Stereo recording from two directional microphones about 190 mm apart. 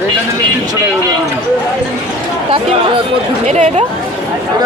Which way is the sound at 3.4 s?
35° right (ahead or behind).